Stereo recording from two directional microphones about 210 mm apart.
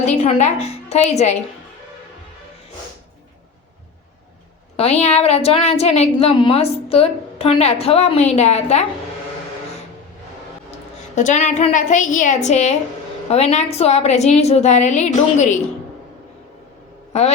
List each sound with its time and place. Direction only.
0.0 s a woman's voice: 30° left (ahead or behind)
4.8 s a woman's voice: 30° left (ahead or behind)
11.1 s a woman's voice: 35° left (ahead or behind)
17.1 s speech: 30° left (ahead or behind)